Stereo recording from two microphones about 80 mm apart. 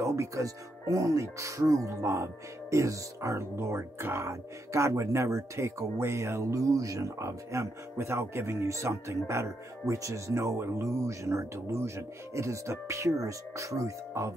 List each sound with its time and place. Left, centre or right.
0.0 s speech: right